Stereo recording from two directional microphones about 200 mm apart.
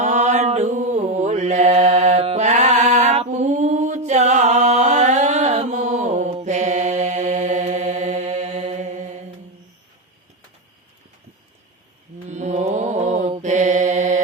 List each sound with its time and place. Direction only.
0.0 s mantra: 35° right (ahead or behind)
12.3 s mantra: 35° right (ahead or behind)